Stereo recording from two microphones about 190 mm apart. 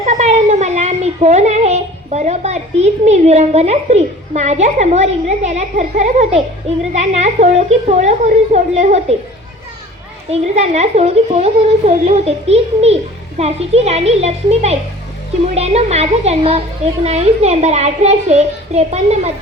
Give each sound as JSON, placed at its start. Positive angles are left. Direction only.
{"t": 0.0, "sound": "a child's voice", "side_deg": -35}
{"t": 10.4, "sound": "a woman's voice", "side_deg": -35}